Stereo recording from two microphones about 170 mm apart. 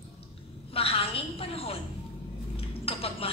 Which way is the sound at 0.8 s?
35° left (ahead or behind).